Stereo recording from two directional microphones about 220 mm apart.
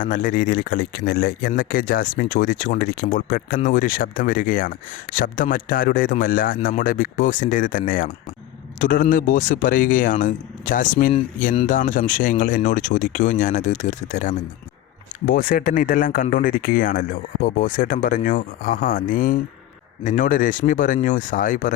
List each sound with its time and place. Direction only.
0.0 s speech: 35° left (ahead or behind)